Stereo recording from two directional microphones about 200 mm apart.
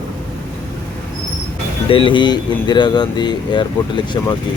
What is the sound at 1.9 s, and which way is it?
Speech, 25° left (ahead or behind).